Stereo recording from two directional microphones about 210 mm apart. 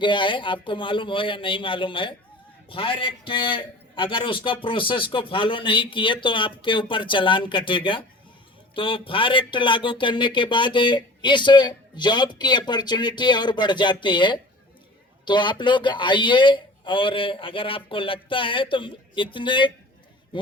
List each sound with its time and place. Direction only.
0.0 s speech: 25° left (ahead or behind)